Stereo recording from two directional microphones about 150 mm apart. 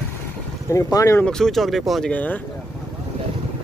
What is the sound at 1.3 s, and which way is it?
Speech, centre (ahead or behind).